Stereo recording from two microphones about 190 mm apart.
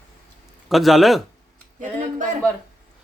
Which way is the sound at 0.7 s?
Centre (ahead or behind).